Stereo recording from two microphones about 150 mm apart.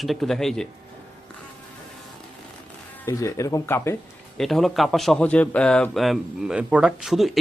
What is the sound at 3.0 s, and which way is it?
Speech, 20° left (ahead or behind).